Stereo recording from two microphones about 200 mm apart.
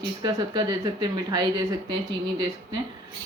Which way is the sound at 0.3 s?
20° right (ahead or behind).